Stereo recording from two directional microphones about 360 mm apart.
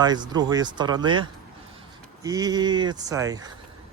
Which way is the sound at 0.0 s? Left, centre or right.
Centre.